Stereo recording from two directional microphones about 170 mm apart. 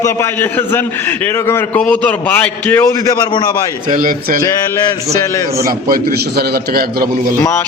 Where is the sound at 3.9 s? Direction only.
55° right (ahead or behind).